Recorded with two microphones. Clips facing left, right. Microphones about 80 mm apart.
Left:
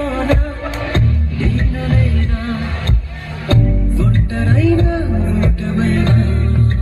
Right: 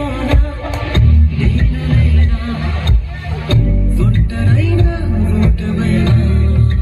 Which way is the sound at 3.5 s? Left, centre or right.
Left.